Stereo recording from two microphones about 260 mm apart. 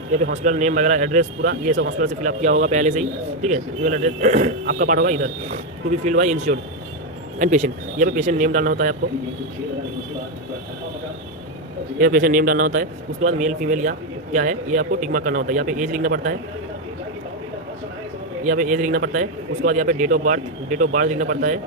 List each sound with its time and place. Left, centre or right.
0.1 s a man's voice: right
11.9 s a man's voice: right
18.4 s speech: right